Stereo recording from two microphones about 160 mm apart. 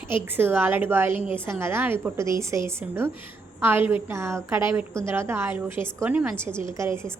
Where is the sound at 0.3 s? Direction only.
15° right (ahead or behind).